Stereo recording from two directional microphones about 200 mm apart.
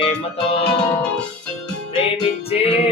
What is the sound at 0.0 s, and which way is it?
Music, 30° left (ahead or behind).